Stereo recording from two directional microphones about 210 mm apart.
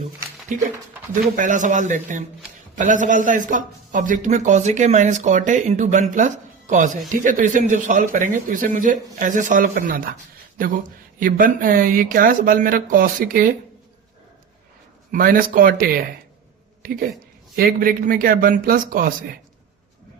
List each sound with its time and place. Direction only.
0.5 s a man's voice: 35° right (ahead or behind)
11.2 s a man's voice: 40° right (ahead or behind)
15.1 s speech: 40° right (ahead or behind)
17.6 s speech: 45° right (ahead or behind)